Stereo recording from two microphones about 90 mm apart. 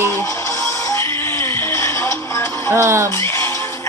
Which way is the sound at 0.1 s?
35° left (ahead or behind).